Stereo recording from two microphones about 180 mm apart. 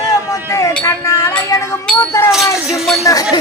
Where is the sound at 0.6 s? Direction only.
20° left (ahead or behind).